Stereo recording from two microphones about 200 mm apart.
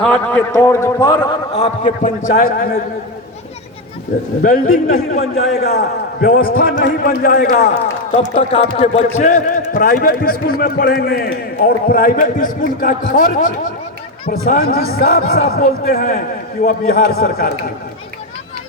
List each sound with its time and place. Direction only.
0.0 s a man's voice: 5° left (ahead or behind)
1.5 s a man's voice: 35° left (ahead or behind)
4.4 s a man's voice: 45° left (ahead or behind)